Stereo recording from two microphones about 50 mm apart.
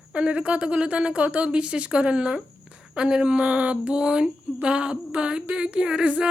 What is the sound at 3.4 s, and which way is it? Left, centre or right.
Speech, right.